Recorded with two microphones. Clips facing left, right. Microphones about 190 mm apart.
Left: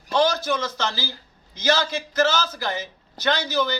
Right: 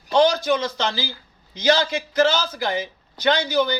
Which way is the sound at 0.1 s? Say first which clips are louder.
Right 4 dB; 15° right (ahead or behind).